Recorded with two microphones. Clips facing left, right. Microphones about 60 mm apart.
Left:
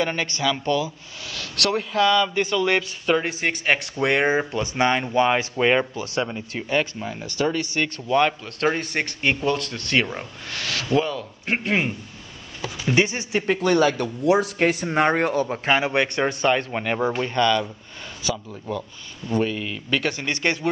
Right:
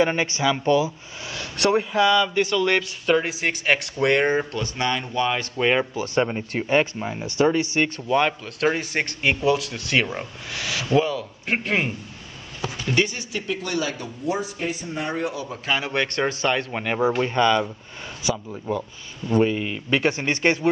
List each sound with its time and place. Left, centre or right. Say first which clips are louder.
0.0 s speech: right 3 dB; centre
2.2 s a man's voice: right 1 dB; centre; by 5.5 s left
5.6 s a man's voice: even; centre
6.1 s speech: right 4 dB; right
8.1 s a man's voice: left 4 dB; centre
12.8 s speech: left 3 dB; centre
13.5 s speech: left 8 dB; left
15.9 s speech: left 2 dB; centre
16.3 s a man's voice: left 2 dB; centre
17.2 s speech: right 1 dB; centre